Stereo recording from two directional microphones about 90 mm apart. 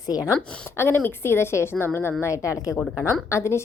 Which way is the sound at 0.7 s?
25° left (ahead or behind).